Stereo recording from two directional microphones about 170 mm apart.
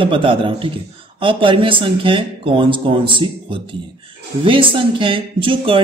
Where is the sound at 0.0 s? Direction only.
30° right (ahead or behind).